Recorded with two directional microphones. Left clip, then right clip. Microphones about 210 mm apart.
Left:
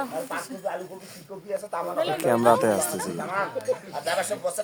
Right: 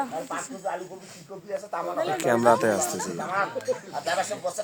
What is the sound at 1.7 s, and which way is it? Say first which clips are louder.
Speech: left 1 dB; 35° left (ahead or behind).